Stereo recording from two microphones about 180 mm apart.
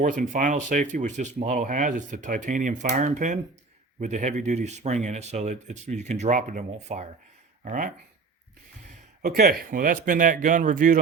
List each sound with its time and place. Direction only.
0.0 s speech: 45° right (ahead or behind)
9.2 s speech: 55° right (ahead or behind)